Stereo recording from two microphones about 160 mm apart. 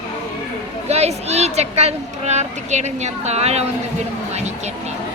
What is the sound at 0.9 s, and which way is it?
A woman's voice, 40° right (ahead or behind).